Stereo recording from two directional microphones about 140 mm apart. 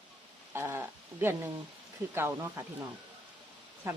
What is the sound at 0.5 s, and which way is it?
Speech, 15° right (ahead or behind).